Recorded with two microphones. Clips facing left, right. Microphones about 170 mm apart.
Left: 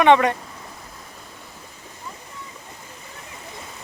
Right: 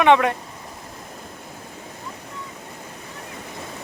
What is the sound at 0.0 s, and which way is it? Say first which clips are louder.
Speech: left 1 dB; centre (ahead or behind).